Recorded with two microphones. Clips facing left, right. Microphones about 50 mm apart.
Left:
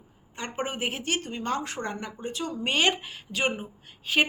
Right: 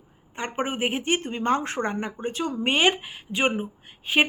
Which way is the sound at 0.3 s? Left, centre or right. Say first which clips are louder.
Right 4 dB; right.